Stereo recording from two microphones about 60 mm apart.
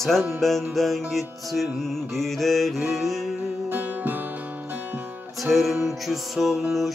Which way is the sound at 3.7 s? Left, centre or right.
Right.